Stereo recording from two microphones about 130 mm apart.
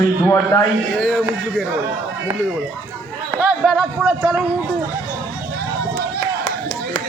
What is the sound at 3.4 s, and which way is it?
Speech, 5° right (ahead or behind).